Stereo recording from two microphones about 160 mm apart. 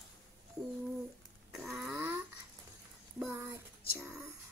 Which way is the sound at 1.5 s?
Centre (ahead or behind).